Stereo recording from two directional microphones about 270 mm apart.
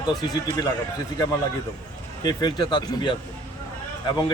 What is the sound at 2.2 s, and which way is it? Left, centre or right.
A man's voice, centre.